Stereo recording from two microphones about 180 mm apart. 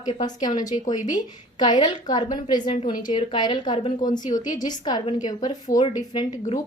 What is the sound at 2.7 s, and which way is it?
Speech, 40° left (ahead or behind).